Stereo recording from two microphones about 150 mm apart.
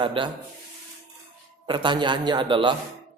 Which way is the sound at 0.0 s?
35° right (ahead or behind).